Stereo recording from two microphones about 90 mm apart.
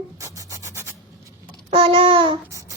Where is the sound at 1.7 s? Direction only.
90° right.